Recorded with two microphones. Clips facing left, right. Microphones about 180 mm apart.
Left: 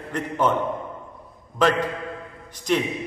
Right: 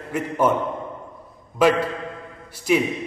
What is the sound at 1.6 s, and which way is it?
A man's voice, 10° right (ahead or behind).